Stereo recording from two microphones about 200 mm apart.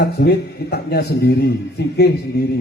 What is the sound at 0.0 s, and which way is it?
A man's voice, 55° left (ahead or behind).